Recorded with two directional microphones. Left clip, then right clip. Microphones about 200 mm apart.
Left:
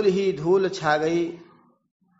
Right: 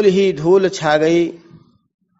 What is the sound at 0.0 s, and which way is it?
A man's voice, 35° right (ahead or behind).